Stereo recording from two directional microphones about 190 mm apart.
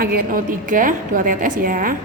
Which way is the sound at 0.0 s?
55° right (ahead or behind).